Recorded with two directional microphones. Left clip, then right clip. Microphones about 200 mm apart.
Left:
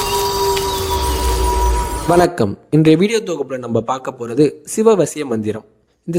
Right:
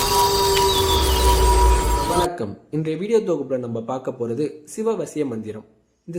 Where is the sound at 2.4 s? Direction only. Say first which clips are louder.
Left 11 dB; 45° left (ahead or behind).